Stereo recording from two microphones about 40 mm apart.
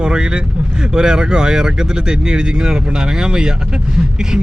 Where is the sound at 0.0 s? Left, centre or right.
Right.